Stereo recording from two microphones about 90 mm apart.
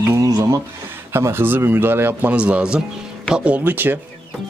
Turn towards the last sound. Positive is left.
turn(degrees=-20)  # may be behind; listen again after turning